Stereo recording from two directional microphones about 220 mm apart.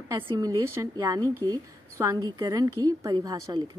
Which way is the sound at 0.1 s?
15° right (ahead or behind).